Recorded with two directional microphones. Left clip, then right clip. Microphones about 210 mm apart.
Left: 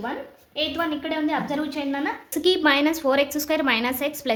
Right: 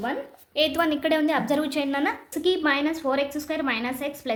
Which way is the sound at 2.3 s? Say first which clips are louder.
Left 5 dB; 10° left (ahead or behind).